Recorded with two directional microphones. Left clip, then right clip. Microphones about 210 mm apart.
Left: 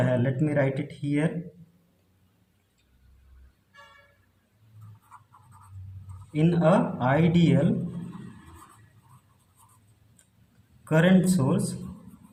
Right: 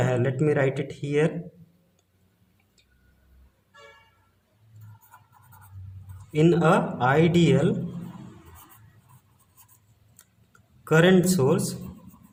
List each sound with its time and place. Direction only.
0.0 s speech: 40° right (ahead or behind)
6.3 s speech: 40° right (ahead or behind)
10.8 s speech: 40° right (ahead or behind)